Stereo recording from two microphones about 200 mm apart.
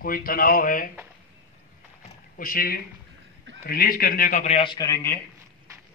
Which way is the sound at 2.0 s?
45° left (ahead or behind).